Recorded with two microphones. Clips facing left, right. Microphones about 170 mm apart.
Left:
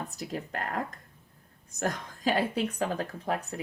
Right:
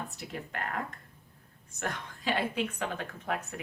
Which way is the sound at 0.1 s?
40° left (ahead or behind).